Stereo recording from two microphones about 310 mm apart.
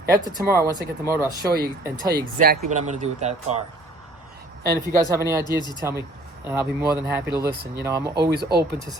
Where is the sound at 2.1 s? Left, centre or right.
Right.